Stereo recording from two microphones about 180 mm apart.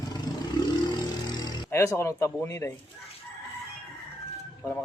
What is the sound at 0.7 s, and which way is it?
Vehicle, 25° left (ahead or behind).